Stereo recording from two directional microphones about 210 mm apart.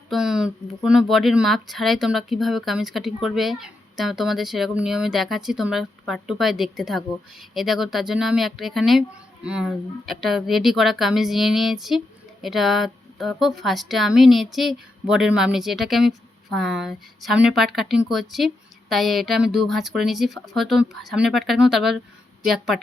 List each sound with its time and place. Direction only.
0.1 s speech: centre (ahead or behind)